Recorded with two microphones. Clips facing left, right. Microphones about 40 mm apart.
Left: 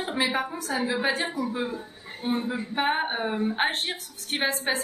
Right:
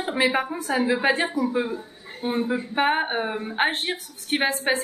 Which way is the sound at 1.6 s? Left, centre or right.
Centre.